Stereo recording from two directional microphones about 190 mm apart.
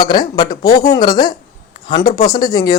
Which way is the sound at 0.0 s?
25° left (ahead or behind).